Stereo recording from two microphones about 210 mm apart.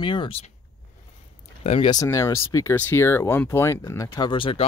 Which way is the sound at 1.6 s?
30° left (ahead or behind).